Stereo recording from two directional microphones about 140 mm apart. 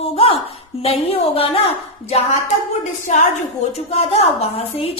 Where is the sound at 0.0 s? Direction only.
40° left (ahead or behind).